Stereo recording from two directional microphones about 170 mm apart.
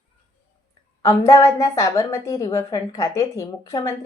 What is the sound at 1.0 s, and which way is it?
A woman's voice, 20° left (ahead or behind).